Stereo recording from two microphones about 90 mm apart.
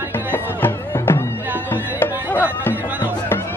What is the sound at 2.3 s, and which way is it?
Music, 20° left (ahead or behind).